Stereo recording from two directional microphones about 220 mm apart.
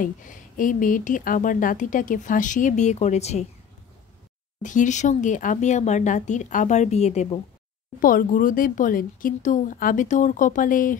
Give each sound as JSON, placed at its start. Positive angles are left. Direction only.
{"t": 0.0, "sound": "speech", "side_deg": 35}
{"t": 4.6, "sound": "speech", "side_deg": 35}